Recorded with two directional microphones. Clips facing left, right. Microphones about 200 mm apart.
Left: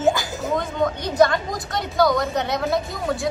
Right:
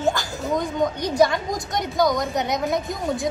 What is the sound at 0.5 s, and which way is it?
A woman's voice, 15° right (ahead or behind).